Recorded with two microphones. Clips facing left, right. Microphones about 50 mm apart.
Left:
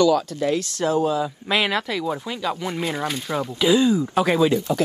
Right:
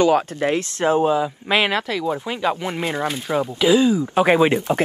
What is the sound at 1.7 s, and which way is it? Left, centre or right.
Speech, centre.